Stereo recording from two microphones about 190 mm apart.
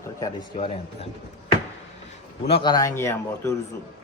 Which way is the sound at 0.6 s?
30° left (ahead or behind).